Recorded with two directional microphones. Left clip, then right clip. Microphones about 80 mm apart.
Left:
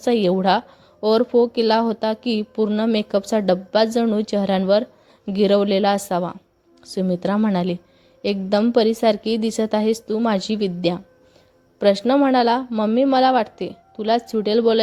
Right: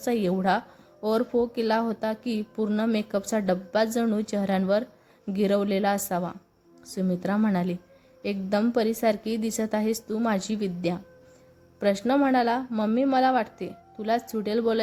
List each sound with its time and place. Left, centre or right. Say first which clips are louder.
0.0 s a woman's voice: left 8 dB; left